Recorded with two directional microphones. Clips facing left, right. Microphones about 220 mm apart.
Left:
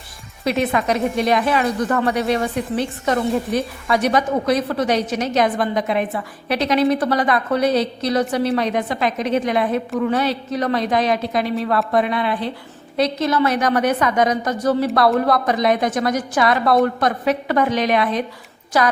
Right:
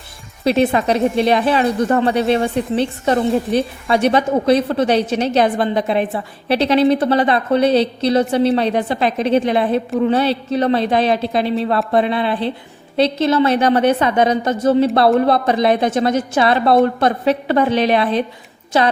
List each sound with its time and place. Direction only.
0.4 s speech: 30° right (ahead or behind)